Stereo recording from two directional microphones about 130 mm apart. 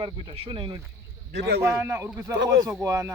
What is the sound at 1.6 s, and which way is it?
Speech, 20° right (ahead or behind).